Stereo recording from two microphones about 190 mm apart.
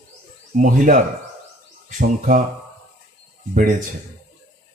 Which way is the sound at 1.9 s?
45° right (ahead or behind).